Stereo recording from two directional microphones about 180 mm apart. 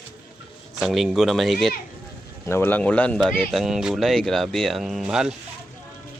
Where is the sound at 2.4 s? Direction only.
10° left (ahead or behind); by 5.3 s 5° right (ahead or behind).